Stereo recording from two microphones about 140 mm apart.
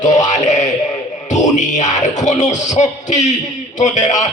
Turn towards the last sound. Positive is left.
turn(degrees=60)  # may be behind; listen again after turning